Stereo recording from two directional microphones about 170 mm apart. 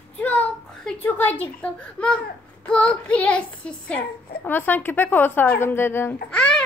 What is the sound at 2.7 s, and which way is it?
A woman's voice, 5° left (ahead or behind).